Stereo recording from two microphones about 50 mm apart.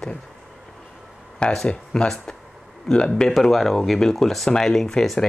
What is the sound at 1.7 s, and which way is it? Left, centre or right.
Speech, centre.